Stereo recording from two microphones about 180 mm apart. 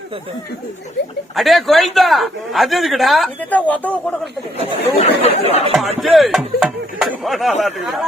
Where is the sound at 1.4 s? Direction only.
Centre (ahead or behind).